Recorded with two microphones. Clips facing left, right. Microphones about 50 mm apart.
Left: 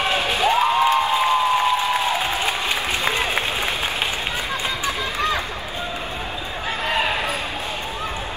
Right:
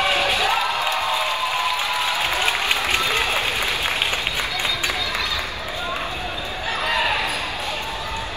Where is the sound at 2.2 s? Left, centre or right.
Right.